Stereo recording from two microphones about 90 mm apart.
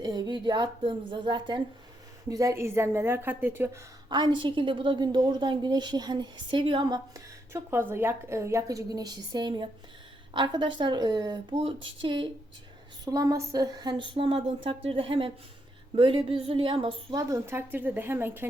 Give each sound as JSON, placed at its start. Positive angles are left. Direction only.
{"t": 0.0, "sound": "a woman's voice", "side_deg": -50}
{"t": 2.3, "sound": "a woman's voice", "side_deg": -35}
{"t": 4.1, "sound": "a woman's voice", "side_deg": -55}
{"t": 7.5, "sound": "a woman's voice", "side_deg": -25}
{"t": 11.6, "sound": "a woman's voice", "side_deg": -70}
{"t": 13.1, "sound": "a woman's voice", "side_deg": -40}
{"t": 16.0, "sound": "a woman's voice", "side_deg": -70}
{"t": 17.2, "sound": "a woman's voice", "side_deg": -40}
{"t": 17.4, "sound": "a woman's voice", "side_deg": -25}